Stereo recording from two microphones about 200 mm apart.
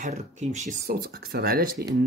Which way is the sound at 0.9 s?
50° right (ahead or behind).